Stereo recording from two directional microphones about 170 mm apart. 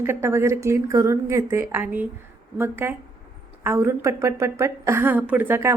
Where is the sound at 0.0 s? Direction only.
15° right (ahead or behind).